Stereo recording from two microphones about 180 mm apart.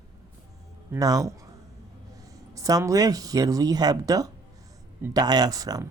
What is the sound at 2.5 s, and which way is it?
Speech, 20° right (ahead or behind).